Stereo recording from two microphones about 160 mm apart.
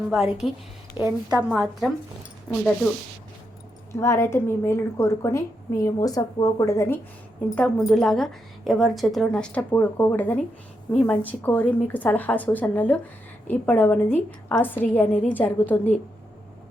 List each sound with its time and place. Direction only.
0.1 s a woman's voice: 5° right (ahead or behind)
1.0 s a woman's voice: 25° left (ahead or behind)
1.5 s a woman's voice: 10° right (ahead or behind)
3.9 s a woman's voice: 20° left (ahead or behind)
7.5 s a woman's voice: 5° left (ahead or behind)